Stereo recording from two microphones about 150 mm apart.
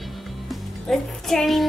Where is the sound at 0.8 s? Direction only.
Centre (ahead or behind).